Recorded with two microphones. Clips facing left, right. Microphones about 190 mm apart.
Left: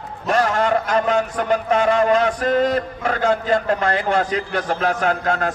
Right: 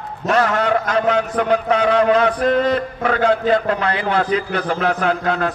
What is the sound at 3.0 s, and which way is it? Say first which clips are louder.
Speech: right 4 dB; 60° right (ahead or behind).